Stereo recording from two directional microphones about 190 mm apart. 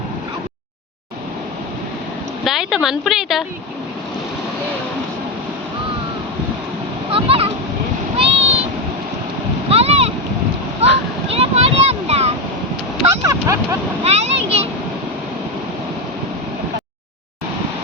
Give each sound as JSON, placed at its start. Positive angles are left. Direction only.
{"t": 2.4, "sound": "speech", "side_deg": 0}
{"t": 7.1, "sound": "splash", "side_deg": -30}
{"t": 8.2, "sound": "a sound", "side_deg": -30}
{"t": 9.6, "sound": "boat", "side_deg": -30}
{"t": 11.3, "sound": "a sound", "side_deg": -30}
{"t": 13.1, "sound": "speech", "side_deg": -15}
{"t": 14.0, "sound": "a child's voice", "side_deg": -35}